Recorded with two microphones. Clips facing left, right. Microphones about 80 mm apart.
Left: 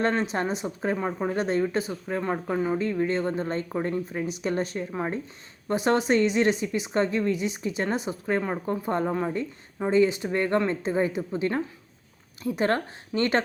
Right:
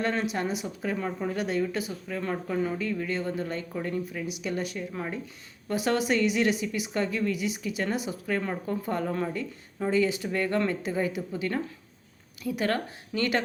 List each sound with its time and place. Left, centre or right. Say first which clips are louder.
0.0 s speech: left 3 dB; left